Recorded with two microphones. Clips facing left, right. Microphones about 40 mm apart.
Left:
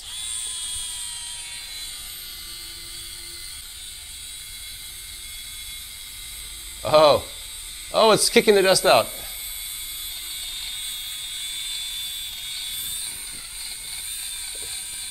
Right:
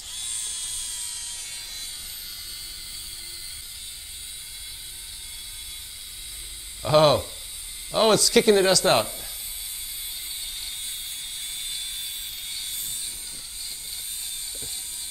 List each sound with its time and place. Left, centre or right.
0.1 s drill: left
6.8 s speech: centre
10.4 s a sound: left
11.8 s vehicle: centre